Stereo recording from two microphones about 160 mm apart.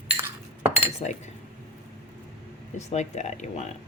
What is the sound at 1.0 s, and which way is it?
Cutlery, 40° left (ahead or behind).